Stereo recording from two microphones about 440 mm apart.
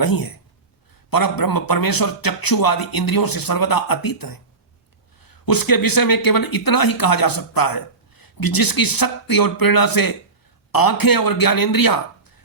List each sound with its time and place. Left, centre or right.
0.0 s speech: left